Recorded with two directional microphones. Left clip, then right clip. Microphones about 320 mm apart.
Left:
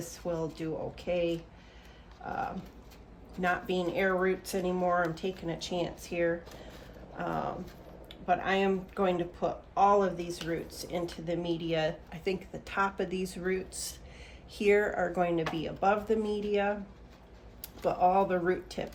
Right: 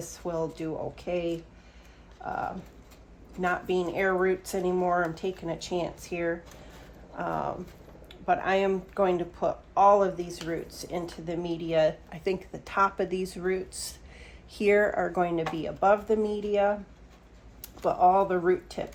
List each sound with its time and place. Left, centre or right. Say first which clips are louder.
0.0 s speech: right 3 dB; centre
3.4 s speech: right 3 dB; centre